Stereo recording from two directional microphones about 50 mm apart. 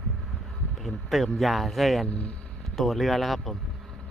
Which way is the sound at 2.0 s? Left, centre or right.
Left.